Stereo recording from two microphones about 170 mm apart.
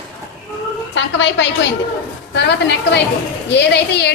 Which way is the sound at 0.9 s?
90° left.